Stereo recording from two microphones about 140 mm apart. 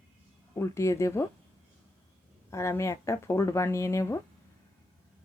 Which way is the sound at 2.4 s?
20° left (ahead or behind).